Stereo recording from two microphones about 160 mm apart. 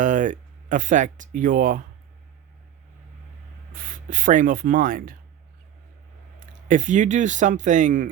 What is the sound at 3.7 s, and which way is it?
Speech, 60° right (ahead or behind).